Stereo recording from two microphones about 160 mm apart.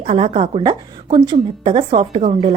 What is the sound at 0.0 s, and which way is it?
A woman's voice, 40° right (ahead or behind).